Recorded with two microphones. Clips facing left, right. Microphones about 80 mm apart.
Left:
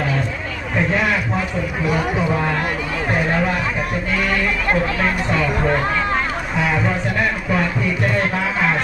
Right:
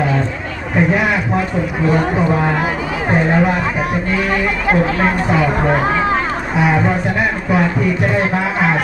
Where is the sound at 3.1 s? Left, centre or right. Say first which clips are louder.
Right 5 dB; centre.